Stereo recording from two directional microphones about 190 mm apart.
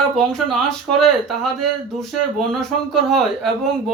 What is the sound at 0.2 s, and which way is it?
Speech, centre (ahead or behind).